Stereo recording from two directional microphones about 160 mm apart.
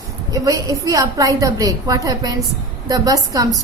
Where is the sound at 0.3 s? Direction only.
20° right (ahead or behind).